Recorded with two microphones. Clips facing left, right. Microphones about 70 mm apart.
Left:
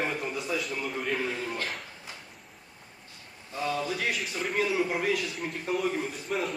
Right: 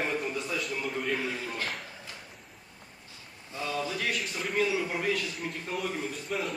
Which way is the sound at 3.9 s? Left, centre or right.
Centre.